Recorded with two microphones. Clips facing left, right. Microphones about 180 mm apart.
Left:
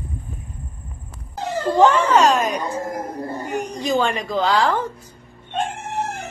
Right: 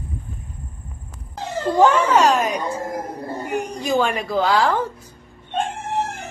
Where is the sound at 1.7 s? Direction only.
10° right (ahead or behind).